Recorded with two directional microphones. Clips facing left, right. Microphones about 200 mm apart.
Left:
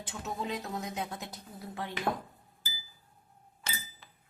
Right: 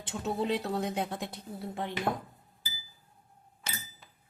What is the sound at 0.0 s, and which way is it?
A woman's voice, 30° right (ahead or behind).